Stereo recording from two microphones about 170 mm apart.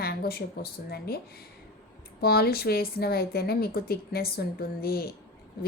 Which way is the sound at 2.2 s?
65° left (ahead or behind).